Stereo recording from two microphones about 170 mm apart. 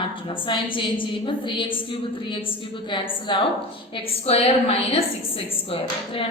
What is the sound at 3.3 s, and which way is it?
A woman's voice, 25° left (ahead or behind).